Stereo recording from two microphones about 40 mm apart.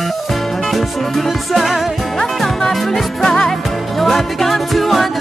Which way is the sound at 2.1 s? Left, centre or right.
Centre.